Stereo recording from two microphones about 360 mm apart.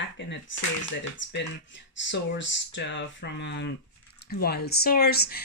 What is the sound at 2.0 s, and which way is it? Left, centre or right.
Speech, left.